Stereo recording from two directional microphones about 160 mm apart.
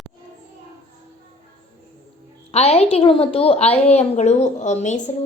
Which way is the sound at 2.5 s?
40° left (ahead or behind).